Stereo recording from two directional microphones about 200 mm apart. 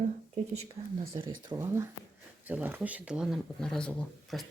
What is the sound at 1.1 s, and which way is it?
Speech, 15° right (ahead or behind).